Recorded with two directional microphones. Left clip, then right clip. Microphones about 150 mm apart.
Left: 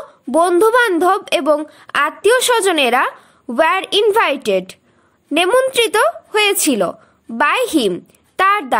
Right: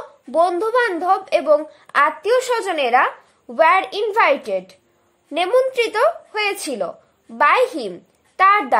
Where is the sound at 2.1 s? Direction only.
35° left (ahead or behind).